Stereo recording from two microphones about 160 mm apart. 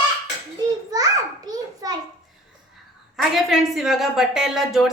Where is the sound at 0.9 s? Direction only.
25° right (ahead or behind).